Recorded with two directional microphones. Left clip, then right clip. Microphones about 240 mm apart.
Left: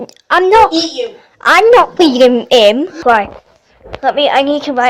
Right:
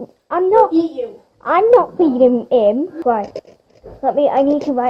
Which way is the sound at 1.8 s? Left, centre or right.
Centre.